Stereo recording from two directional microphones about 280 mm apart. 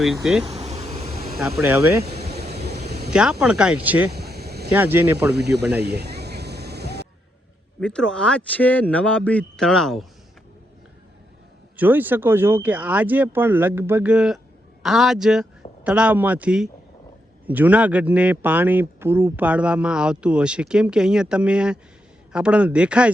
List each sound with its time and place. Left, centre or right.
0.0 s a man's voice: centre
0.4 s bee: right
1.4 s speech: centre
2.3 s vehicle: right
3.1 s a man's voice: centre
4.1 s vehicle: right
4.7 s speech: centre
5.3 s speech: right
5.8 s a sound: right
7.8 s a man's voice: centre
11.8 s a man's voice: centre